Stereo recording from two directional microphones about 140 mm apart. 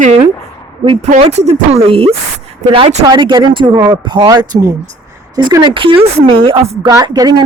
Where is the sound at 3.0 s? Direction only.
30° right (ahead or behind).